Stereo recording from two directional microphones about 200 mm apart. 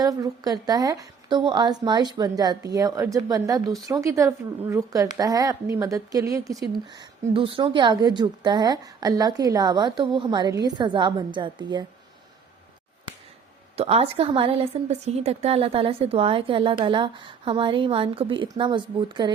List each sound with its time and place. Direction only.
0.0 s a woman's voice: 20° right (ahead or behind)
13.7 s a woman's voice: 30° right (ahead or behind)